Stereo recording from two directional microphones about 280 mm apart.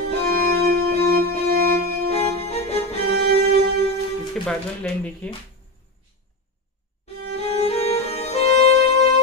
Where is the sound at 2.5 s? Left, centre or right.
Left.